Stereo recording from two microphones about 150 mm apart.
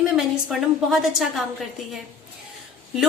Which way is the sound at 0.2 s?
Centre (ahead or behind).